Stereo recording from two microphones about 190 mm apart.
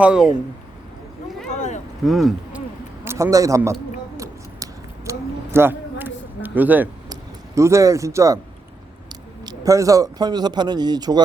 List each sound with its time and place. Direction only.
0.0 s speech: 5° right (ahead or behind)
1.5 s a sound: 40° left (ahead or behind)
2.0 s speech: centre (ahead or behind)
3.0 s a man's voice: 15° right (ahead or behind)
4.2 s a sound: 15° right (ahead or behind)
7.1 s speech: 15° right (ahead or behind)
9.5 s speech: 15° right (ahead or behind)